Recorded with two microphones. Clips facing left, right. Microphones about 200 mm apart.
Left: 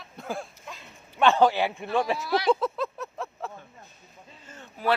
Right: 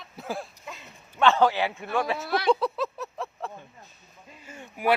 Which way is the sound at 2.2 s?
55° right (ahead or behind).